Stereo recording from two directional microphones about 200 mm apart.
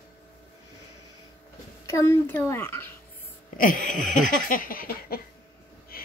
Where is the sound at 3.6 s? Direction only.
40° left (ahead or behind).